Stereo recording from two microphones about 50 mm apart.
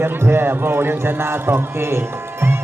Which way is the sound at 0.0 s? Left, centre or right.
Right.